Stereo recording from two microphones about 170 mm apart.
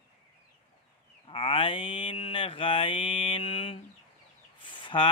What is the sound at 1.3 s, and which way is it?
Mantra, 35° left (ahead or behind).